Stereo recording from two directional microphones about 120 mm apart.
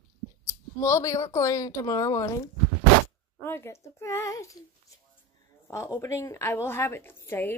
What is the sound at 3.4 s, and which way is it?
Speech, 20° left (ahead or behind).